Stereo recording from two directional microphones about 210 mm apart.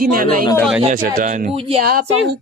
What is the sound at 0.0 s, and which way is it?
Speech, 45° right (ahead or behind).